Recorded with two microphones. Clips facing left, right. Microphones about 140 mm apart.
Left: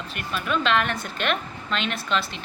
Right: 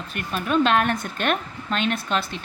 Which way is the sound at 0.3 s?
45° right (ahead or behind).